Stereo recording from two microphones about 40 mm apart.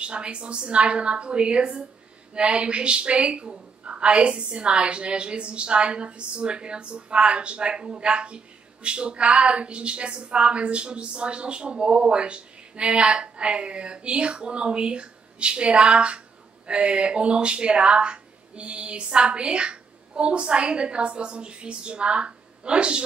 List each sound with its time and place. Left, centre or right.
0.0 s a woman's voice: right